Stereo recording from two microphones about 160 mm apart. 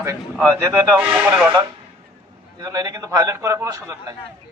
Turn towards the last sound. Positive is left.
turn(degrees=-15)  # may be behind; listen again after turning